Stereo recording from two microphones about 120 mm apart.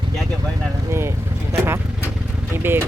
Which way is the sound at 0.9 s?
20° right (ahead or behind).